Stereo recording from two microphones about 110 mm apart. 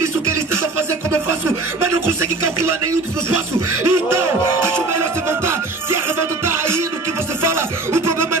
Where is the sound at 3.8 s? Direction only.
25° right (ahead or behind).